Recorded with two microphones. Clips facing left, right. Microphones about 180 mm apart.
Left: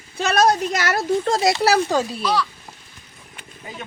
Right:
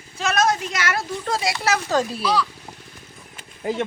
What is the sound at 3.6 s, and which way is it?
Speech, 70° right (ahead or behind).